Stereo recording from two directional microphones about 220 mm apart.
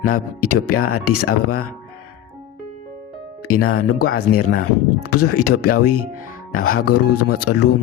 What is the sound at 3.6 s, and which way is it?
Speech, 80° left.